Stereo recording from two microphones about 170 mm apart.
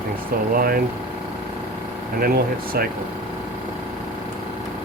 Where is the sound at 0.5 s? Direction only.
60° right (ahead or behind).